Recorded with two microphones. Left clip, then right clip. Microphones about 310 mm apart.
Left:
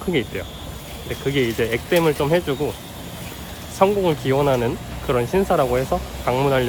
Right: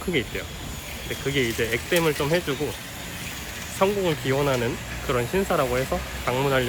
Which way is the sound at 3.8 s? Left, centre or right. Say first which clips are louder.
Left 5 dB; centre.